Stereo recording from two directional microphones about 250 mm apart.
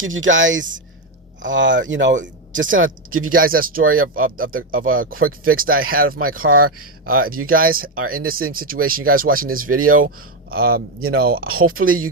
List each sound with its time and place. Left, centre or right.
0.0 s speech: right
2.2 s a sound: right
2.7 s speech: right
3.2 s speech: right